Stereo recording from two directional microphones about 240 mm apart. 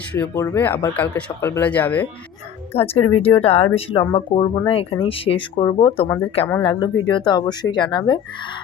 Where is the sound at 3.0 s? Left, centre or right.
Left.